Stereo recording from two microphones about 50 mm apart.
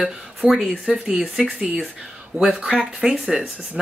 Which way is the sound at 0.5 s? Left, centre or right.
Centre.